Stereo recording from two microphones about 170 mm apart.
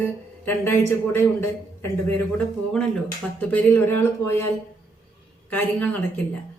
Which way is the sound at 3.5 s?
10° left (ahead or behind).